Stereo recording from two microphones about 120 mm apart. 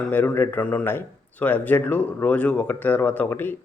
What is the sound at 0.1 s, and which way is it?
Speech, 15° left (ahead or behind).